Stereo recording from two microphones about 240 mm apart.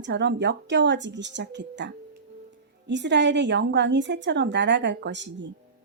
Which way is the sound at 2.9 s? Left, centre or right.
Right.